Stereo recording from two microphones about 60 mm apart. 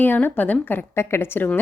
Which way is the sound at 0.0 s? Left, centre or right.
Left.